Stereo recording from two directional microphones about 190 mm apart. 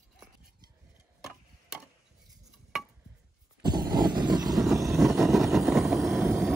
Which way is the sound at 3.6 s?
20° right (ahead or behind).